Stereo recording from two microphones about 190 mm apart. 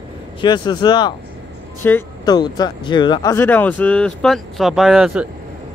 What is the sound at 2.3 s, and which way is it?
Speech, 20° left (ahead or behind).